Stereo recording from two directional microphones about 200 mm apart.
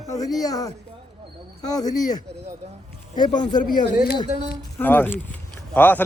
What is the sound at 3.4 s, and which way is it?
Speech, 20° left (ahead or behind).